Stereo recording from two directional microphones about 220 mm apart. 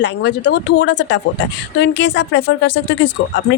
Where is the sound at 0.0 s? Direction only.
50° left (ahead or behind).